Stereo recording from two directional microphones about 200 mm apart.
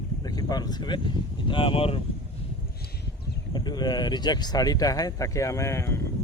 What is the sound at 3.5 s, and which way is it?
Speech, 20° left (ahead or behind).